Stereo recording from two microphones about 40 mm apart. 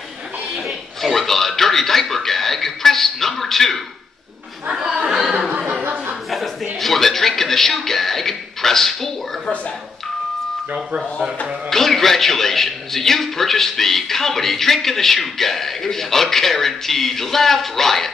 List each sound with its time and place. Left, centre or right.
0.6 s television: centre
4.7 s chuckle: centre
5.5 s chuckle: right
6.3 s chuckle: centre
11.7 s a man's voice: centre